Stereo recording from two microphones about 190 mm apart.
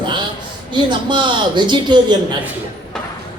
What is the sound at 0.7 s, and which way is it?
Speech, 25° right (ahead or behind).